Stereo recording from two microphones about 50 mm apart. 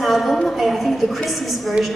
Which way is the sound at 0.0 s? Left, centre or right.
Centre.